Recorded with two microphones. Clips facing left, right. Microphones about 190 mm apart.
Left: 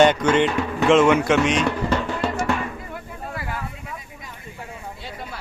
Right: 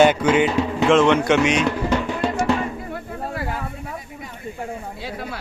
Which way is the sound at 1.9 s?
20° right (ahead or behind).